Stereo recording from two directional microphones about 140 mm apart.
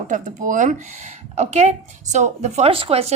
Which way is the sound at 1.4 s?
50° right (ahead or behind).